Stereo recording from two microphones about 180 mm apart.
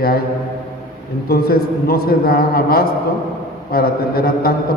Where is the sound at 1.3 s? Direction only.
55° left (ahead or behind).